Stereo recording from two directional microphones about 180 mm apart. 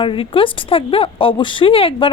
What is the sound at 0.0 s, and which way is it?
Speech, 30° left (ahead or behind).